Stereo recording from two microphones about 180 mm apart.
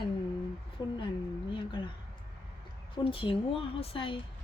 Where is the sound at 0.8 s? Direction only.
20° left (ahead or behind).